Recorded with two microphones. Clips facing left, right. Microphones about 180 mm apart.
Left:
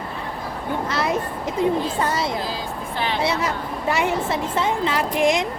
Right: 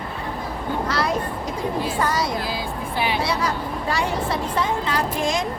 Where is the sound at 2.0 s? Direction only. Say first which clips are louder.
Even; 25° left (ahead or behind).